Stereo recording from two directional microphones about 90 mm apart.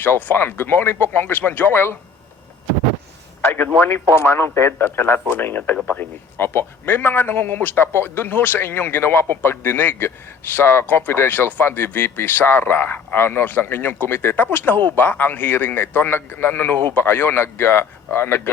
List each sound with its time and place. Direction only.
0.0 s speech: 20° left (ahead or behind)
3.4 s a man's voice: 20° left (ahead or behind)